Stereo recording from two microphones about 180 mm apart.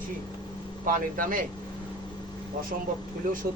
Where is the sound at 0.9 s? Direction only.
50° right (ahead or behind).